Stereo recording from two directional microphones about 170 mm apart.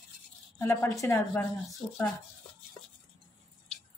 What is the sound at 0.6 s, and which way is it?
Speech, 15° left (ahead or behind).